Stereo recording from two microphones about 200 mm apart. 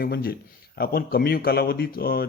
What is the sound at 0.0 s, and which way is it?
Speech, 50° left (ahead or behind).